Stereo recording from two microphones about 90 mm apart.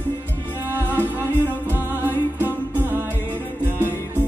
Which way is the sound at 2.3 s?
20° right (ahead or behind).